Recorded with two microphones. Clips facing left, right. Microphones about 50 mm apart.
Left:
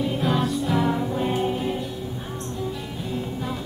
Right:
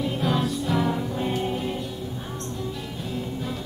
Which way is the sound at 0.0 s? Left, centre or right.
Centre.